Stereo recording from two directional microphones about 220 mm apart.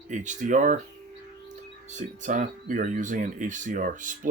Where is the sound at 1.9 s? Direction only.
35° right (ahead or behind).